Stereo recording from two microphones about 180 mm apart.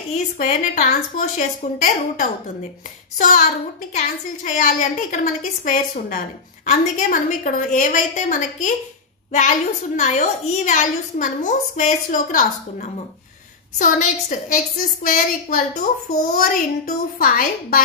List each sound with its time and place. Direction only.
0.4 s a woman's voice: 40° left (ahead or behind)
4.5 s a woman's voice: 45° left (ahead or behind)